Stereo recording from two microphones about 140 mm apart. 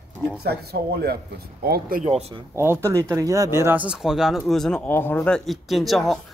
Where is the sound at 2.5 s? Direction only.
15° right (ahead or behind).